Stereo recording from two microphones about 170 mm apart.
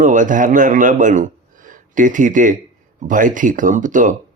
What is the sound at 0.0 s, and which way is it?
A man's voice, 50° right (ahead or behind).